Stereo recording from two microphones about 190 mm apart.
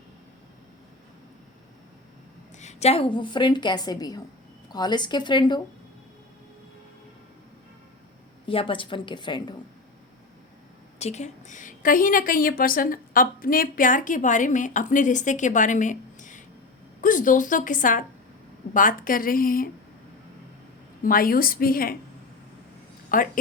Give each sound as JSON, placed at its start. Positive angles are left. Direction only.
{"t": 2.6, "sound": "a woman's voice", "side_deg": 35}
{"t": 8.4, "sound": "a woman's voice", "side_deg": 25}
{"t": 11.0, "sound": "a woman's voice", "side_deg": 35}
{"t": 21.0, "sound": "a woman's voice", "side_deg": 50}
{"t": 23.1, "sound": "a woman's voice", "side_deg": 45}